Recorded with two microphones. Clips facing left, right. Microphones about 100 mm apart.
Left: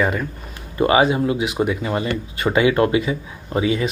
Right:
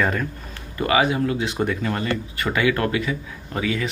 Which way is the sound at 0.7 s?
25° left (ahead or behind).